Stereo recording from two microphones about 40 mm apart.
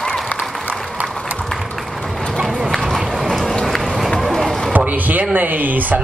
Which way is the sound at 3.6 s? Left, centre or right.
Centre.